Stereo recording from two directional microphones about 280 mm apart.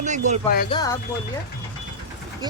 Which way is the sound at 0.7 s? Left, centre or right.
Centre.